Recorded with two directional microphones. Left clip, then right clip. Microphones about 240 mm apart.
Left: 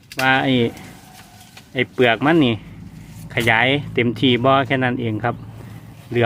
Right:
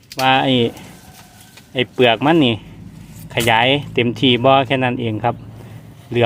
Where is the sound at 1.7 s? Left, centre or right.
Centre.